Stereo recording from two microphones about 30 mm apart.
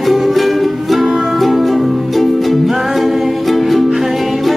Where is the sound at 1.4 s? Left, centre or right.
Centre.